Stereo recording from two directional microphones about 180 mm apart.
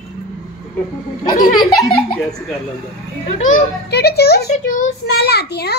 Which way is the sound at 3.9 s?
65° left (ahead or behind).